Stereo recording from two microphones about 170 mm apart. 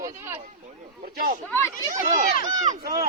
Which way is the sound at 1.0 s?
55° right (ahead or behind).